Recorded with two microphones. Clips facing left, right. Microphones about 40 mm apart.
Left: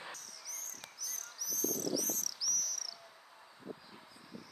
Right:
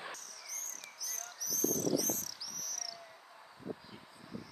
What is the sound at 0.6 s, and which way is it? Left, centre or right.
Cricket, right.